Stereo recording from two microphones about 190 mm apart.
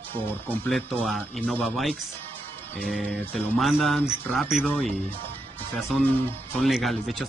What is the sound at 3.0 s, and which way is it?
Speech, 10° left (ahead or behind).